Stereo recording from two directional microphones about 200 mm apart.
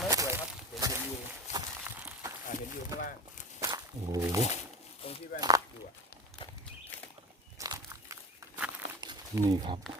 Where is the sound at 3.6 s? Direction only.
20° right (ahead or behind).